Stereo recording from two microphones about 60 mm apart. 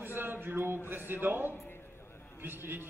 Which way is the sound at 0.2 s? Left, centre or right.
Right.